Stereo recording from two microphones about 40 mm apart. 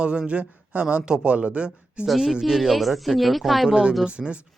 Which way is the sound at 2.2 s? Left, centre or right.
Centre.